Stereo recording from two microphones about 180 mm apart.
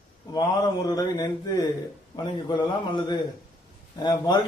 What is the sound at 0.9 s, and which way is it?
A man's voice, 20° left (ahead or behind).